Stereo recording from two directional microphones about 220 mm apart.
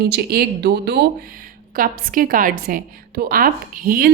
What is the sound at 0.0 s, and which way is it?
A woman's voice, 45° right (ahead or behind).